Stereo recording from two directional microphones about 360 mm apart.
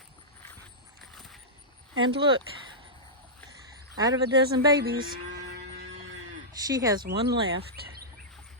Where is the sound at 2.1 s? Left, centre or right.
Centre.